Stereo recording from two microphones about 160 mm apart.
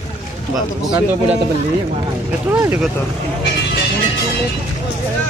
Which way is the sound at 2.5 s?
15° right (ahead or behind).